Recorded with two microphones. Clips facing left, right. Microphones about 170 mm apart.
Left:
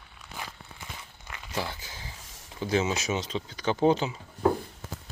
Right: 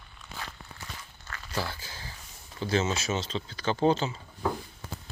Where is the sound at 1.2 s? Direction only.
15° left (ahead or behind).